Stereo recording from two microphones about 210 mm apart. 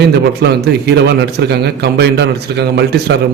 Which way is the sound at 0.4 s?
50° right (ahead or behind).